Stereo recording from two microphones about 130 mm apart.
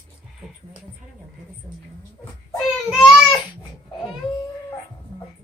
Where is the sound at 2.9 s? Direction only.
Centre (ahead or behind).